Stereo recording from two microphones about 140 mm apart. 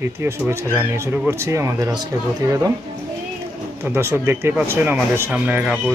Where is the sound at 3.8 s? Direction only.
15° right (ahead or behind).